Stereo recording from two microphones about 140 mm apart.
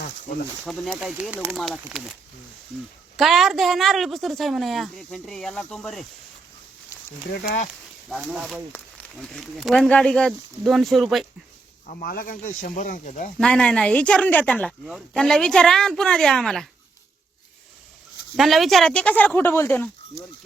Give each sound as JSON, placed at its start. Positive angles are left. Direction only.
{"t": 0.6, "sound": "speech", "side_deg": 5}
{"t": 3.2, "sound": "speech", "side_deg": 0}
{"t": 7.3, "sound": "speech", "side_deg": 75}
{"t": 8.1, "sound": "speech", "side_deg": 0}
{"t": 11.9, "sound": "speech", "side_deg": 80}
{"t": 13.4, "sound": "speech", "side_deg": 5}
{"t": 18.3, "sound": "speech", "side_deg": 0}